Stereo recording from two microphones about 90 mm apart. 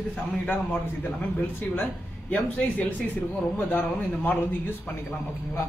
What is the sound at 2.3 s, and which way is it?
A man's voice, 15° left (ahead or behind).